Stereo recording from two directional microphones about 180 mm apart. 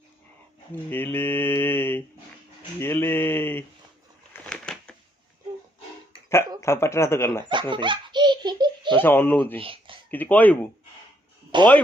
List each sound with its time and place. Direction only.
0.9 s mantra: 10° left (ahead or behind)
4.4 s a sound: 5° left (ahead or behind)
6.6 s mantra: 15° left (ahead or behind)
7.7 s baby laughter: 25° right (ahead or behind)
9.0 s mantra: 10° left (ahead or behind)
9.6 s a sound: 30° right (ahead or behind)
10.1 s mantra: 10° left (ahead or behind)
11.5 s speech: 25° right (ahead or behind)